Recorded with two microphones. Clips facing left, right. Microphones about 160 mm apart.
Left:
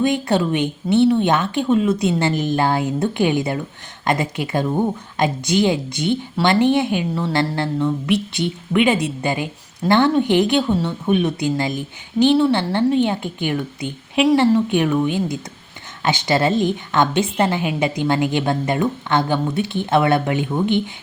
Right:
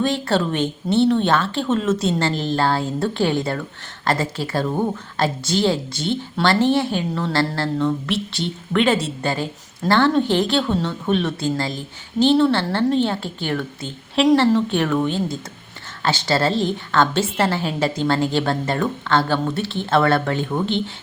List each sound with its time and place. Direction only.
0.0 s speech: 15° left (ahead or behind)